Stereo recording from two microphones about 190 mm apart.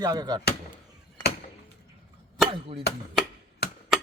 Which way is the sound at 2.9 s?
60° left (ahead or behind).